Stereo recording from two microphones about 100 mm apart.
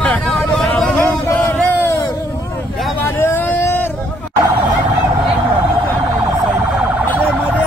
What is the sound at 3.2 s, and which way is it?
Vehicle, 20° left (ahead or behind).